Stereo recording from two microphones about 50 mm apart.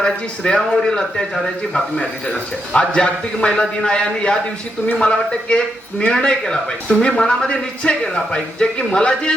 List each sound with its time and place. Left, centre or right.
0.0 s a man's voice: centre